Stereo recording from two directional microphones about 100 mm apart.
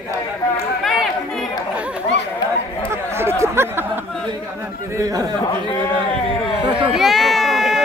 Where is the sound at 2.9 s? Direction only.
25° right (ahead or behind).